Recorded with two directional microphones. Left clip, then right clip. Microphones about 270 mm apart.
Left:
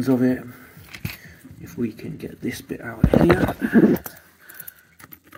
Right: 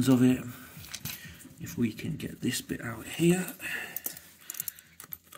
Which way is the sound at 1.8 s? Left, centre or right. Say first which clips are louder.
Left 5 dB; right.